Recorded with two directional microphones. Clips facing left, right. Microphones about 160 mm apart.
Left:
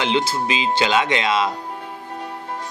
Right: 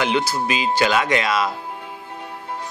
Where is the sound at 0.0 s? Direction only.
25° left (ahead or behind).